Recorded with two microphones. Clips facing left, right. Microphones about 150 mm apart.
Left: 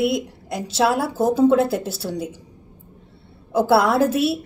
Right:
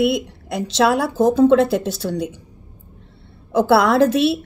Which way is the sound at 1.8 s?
10° left (ahead or behind).